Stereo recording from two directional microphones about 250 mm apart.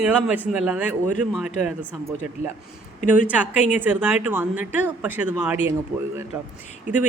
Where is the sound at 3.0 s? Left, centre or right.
Left.